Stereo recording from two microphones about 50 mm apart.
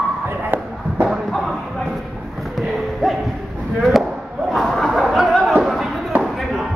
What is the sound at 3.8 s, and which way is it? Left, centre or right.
Chop, centre.